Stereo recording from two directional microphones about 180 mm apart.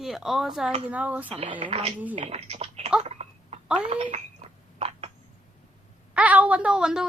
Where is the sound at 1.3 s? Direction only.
30° right (ahead or behind).